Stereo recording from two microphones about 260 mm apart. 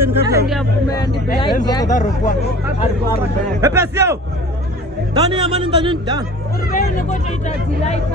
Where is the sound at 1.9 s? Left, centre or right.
Left.